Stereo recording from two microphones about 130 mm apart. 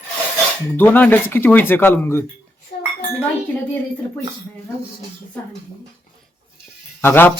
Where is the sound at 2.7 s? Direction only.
60° left (ahead or behind).